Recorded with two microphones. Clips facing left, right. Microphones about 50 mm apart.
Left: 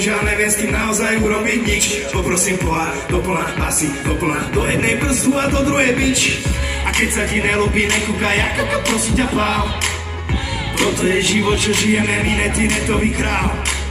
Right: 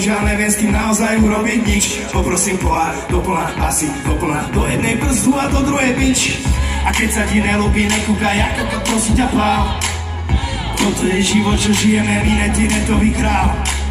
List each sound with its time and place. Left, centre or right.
0.1 s music: centre
4.8 s music: left
7.2 s music: centre
8.4 s music: centre
11.1 s music: centre